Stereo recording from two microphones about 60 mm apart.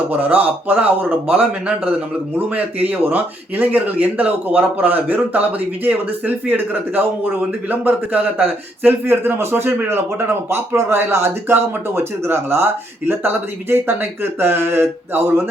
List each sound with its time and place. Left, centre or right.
0.1 s a man's voice: right